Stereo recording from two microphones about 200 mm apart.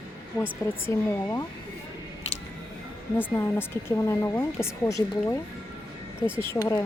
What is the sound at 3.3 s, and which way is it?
Speech, 10° left (ahead or behind).